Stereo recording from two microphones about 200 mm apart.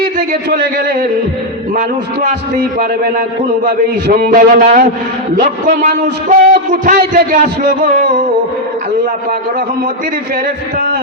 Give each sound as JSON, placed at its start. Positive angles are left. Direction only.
{"t": 0.5, "sound": "a man's voice", "side_deg": -50}
{"t": 2.2, "sound": "a man's voice", "side_deg": -45}